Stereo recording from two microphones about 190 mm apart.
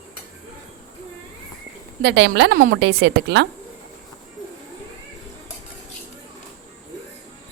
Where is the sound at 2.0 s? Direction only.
65° right (ahead or behind).